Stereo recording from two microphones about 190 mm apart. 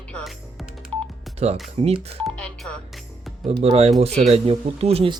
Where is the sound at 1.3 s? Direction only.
30° right (ahead or behind).